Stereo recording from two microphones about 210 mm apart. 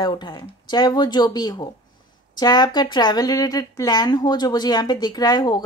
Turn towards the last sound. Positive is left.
turn(degrees=20)  # may be behind; listen again after turning